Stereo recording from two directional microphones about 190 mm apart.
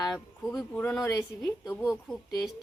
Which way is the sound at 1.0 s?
20° left (ahead or behind).